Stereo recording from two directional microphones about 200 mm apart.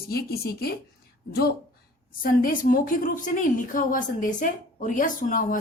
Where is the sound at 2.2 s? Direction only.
45° left (ahead or behind).